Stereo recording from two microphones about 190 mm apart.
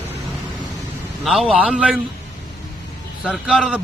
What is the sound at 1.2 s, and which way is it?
Speech, centre (ahead or behind).